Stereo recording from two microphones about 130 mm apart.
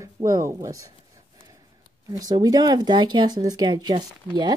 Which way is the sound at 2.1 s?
30° right (ahead or behind).